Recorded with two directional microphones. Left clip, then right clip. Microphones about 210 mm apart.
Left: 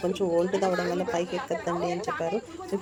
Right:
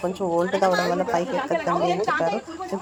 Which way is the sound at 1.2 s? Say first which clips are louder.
Right 6 dB; 45° right (ahead or behind).